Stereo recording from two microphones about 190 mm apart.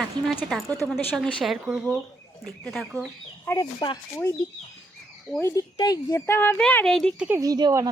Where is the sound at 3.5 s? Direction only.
20° left (ahead or behind).